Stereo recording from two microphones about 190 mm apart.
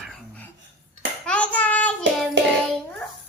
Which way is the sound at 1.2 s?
5° left (ahead or behind).